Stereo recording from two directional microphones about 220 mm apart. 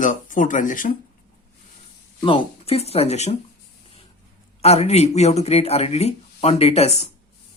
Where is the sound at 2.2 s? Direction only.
25° left (ahead or behind).